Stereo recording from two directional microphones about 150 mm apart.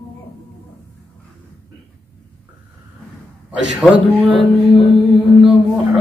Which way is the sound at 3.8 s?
10° right (ahead or behind).